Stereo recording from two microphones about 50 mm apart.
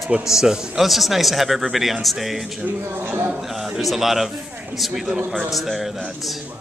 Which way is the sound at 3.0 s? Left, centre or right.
Right.